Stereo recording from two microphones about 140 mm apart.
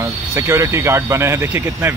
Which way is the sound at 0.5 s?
20° right (ahead or behind).